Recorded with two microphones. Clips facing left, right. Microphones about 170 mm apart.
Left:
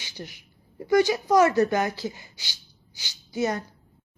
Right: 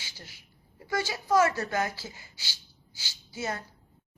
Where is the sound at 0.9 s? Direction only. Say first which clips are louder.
Left 8 dB; 20° left (ahead or behind).